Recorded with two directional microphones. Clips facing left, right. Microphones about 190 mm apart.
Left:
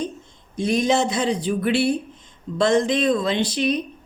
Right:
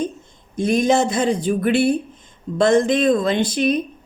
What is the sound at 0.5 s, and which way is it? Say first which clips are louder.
Speech: right 3 dB; 50° right (ahead or behind).